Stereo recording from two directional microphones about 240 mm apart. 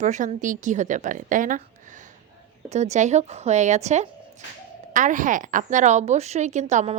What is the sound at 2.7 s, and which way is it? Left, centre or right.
A woman's voice, right.